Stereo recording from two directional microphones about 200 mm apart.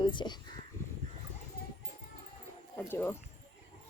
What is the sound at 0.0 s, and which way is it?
Speech, 25° left (ahead or behind).